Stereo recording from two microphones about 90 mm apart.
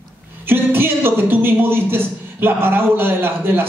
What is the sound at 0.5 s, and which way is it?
A man's voice, 25° right (ahead or behind).